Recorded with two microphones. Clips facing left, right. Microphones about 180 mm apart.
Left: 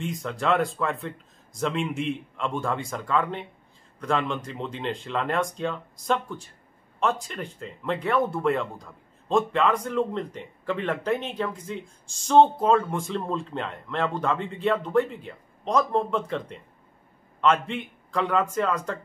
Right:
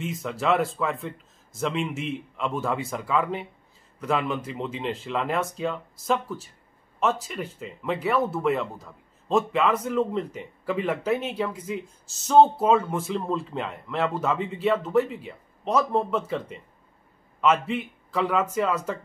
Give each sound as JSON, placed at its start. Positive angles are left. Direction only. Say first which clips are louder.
{"t": 0.0, "sound": "speech", "louder": "right 1 dB", "side_deg": -5}